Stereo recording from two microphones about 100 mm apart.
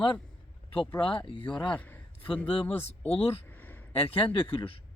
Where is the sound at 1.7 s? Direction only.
15° left (ahead or behind).